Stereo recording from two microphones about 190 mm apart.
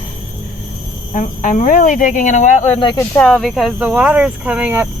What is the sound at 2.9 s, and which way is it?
Speech, 5° left (ahead or behind).